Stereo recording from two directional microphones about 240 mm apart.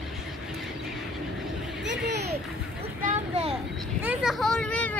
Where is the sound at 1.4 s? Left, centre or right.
Centre.